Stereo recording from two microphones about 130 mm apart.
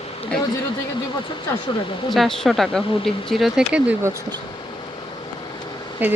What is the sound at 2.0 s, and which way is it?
Speech, centre (ahead or behind).